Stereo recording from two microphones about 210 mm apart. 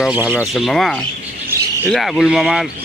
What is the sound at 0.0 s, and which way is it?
A man's voice, 5° right (ahead or behind).